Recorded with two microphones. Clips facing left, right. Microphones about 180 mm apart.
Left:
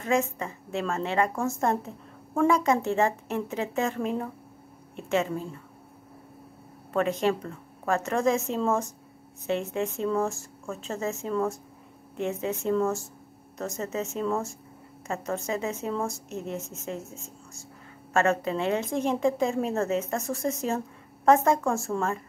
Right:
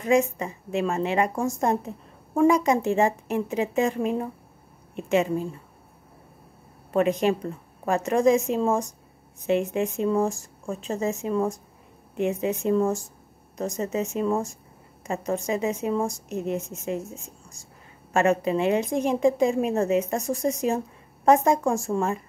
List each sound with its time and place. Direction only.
0.0 s a woman's voice: 15° right (ahead or behind)
6.9 s a woman's voice: 15° right (ahead or behind)